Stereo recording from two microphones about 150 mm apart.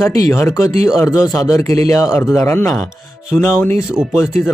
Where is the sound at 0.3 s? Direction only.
20° left (ahead or behind).